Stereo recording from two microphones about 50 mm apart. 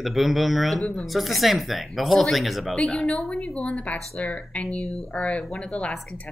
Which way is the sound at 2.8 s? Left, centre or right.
Centre.